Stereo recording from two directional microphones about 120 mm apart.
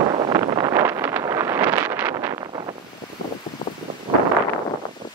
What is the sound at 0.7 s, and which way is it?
Vehicle, 25° right (ahead or behind).